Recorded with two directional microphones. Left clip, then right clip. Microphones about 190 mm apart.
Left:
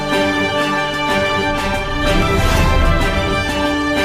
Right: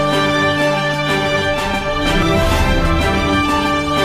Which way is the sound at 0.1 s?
Centre (ahead or behind).